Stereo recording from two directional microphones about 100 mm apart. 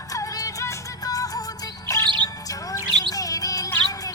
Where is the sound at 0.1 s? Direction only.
35° left (ahead or behind).